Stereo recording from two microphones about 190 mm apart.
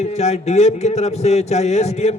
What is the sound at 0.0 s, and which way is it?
A man's voice, 35° left (ahead or behind).